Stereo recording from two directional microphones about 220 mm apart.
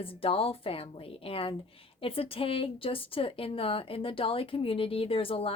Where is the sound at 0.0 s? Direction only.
25° left (ahead or behind).